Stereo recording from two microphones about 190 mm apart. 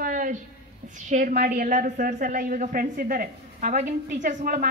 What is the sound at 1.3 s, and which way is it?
A woman's voice, 50° right (ahead or behind).